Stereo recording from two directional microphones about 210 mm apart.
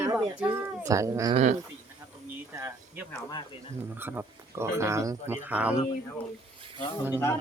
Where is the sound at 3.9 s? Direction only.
10° right (ahead or behind).